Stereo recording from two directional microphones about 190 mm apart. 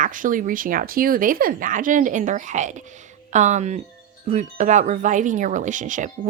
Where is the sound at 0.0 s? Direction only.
45° right (ahead or behind).